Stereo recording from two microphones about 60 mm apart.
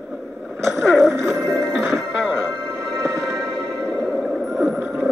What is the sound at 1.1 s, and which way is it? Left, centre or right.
Music, right.